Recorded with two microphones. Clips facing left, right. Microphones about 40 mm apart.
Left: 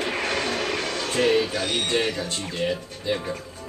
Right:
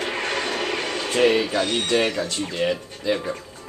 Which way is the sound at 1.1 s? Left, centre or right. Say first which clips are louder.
Right 2 dB; right.